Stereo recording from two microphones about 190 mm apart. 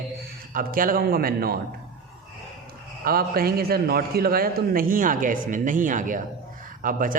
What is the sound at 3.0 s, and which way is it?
A man's voice, 50° right (ahead or behind).